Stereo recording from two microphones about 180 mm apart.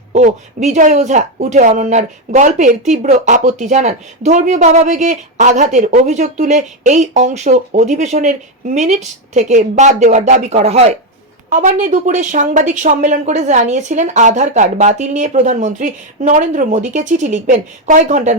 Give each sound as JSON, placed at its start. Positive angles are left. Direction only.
{"t": 0.1, "sound": "speech", "side_deg": -40}